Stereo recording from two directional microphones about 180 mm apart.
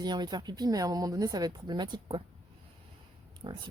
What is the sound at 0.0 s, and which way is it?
Speech, 25° right (ahead or behind).